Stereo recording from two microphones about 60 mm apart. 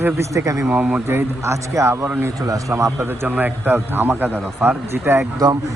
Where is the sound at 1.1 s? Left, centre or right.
Right.